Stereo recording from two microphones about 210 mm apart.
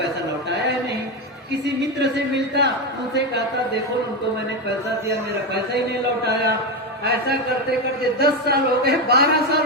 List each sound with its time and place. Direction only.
1.6 s a woman's voice: 55° right (ahead or behind)
7.0 s speech: 50° right (ahead or behind)